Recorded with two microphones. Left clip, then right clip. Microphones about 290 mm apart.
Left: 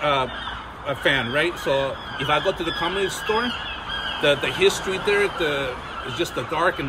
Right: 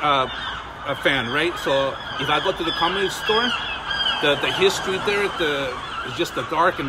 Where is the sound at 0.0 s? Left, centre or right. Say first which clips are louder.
Right 2 dB; centre.